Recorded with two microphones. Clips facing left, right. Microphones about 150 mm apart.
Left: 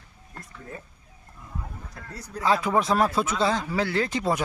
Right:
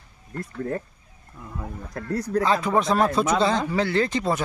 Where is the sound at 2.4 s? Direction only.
5° left (ahead or behind).